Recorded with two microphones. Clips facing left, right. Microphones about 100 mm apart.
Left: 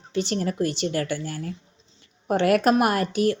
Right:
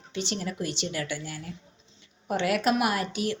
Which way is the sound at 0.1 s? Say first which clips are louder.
Left 7 dB; 45° left (ahead or behind).